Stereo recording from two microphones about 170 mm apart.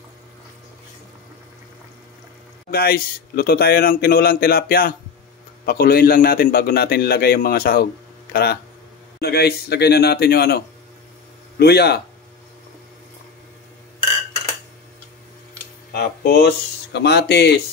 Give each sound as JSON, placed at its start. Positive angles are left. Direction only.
{"t": 2.7, "sound": "a man's voice", "side_deg": 65}
{"t": 15.9, "sound": "speech", "side_deg": 65}